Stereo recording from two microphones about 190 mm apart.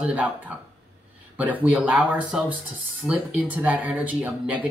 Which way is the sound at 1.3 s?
5° right (ahead or behind).